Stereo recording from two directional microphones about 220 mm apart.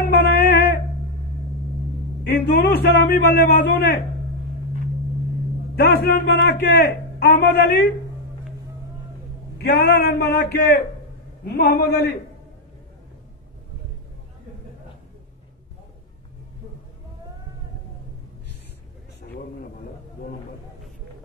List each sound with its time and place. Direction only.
0.0 s a sound: 45° left (ahead or behind)
2.2 s a man's voice: 45° left (ahead or behind)
5.8 s a man's voice: 45° left (ahead or behind)
9.6 s a man's voice: 50° left (ahead or behind)